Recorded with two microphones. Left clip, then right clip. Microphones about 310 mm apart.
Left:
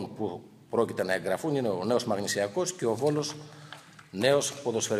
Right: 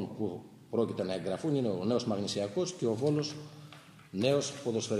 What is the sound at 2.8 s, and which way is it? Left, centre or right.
Speech, left.